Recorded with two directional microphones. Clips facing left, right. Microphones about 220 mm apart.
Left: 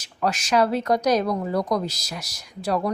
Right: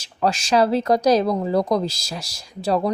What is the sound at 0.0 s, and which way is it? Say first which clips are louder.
Speech: right 3 dB; 30° right (ahead or behind).